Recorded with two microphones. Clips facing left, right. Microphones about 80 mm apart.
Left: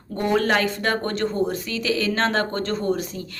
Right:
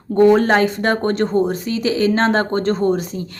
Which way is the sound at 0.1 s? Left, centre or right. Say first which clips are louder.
Right 9 dB; right.